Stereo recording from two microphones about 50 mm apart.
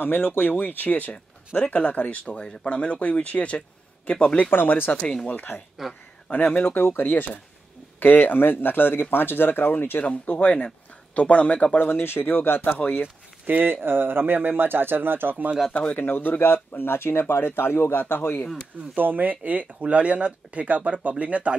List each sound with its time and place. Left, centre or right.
0.0 s speech: left
4.5 s speech: left
4.9 s speech: left
5.8 s speech: centre
6.3 s speech: left
10.0 s speech: left
11.8 s speech: left
12.6 s speech: left
13.5 s speech: right
15.7 s speech: left
16.1 s speech: left
18.9 s speech: right